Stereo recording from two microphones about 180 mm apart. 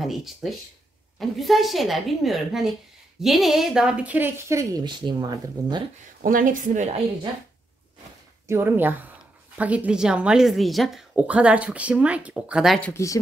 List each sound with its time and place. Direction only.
0.0 s a woman's voice: centre (ahead or behind); by 5.9 s 20° right (ahead or behind)
6.2 s a woman's voice: 50° right (ahead or behind)
8.5 s a woman's voice: 10° right (ahead or behind)
12.9 s speech: 15° left (ahead or behind)